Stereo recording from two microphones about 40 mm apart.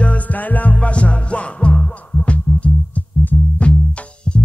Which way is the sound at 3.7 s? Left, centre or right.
Left.